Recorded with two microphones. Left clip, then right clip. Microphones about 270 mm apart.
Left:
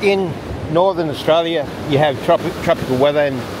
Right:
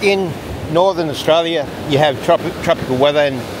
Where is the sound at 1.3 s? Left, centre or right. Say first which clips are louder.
Right 1 dB; centre.